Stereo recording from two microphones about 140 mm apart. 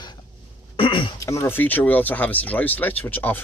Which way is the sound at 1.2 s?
20° left (ahead or behind).